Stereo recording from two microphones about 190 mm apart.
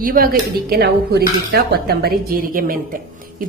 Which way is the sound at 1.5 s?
55° right (ahead or behind).